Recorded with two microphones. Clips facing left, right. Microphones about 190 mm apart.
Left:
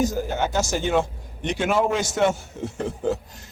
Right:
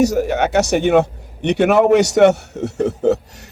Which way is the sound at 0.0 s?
75° right (ahead or behind).